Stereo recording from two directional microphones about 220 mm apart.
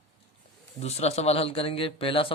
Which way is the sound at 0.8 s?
30° left (ahead or behind).